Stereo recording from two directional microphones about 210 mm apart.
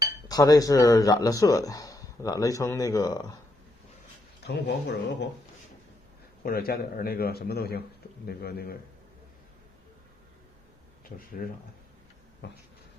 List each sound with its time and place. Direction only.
0.3 s speech: 15° left (ahead or behind)
4.4 s speech: 55° left (ahead or behind)
6.4 s speech: 45° left (ahead or behind)
11.4 s speech: 40° left (ahead or behind)
12.4 s speech: 55° left (ahead or behind)